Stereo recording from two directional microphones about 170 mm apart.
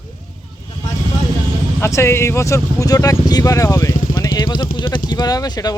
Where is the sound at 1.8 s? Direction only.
15° left (ahead or behind).